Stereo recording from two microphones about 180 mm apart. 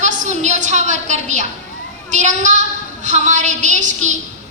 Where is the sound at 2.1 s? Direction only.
45° right (ahead or behind).